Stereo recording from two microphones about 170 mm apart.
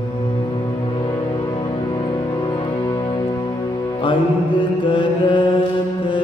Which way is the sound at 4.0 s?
30° left (ahead or behind).